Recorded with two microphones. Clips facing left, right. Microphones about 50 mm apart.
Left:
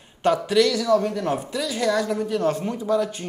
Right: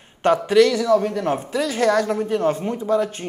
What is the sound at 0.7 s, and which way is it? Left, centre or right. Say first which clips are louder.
Speech: right 2 dB; centre.